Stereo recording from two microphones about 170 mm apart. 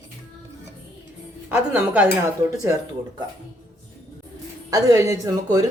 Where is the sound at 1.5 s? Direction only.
10° right (ahead or behind).